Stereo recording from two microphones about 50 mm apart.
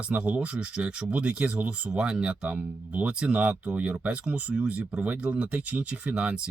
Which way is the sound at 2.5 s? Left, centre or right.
Right.